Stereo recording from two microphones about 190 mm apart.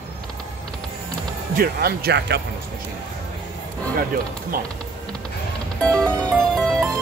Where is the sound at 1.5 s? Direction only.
55° right (ahead or behind).